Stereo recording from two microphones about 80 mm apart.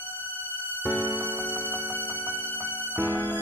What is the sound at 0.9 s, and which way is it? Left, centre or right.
Music, right.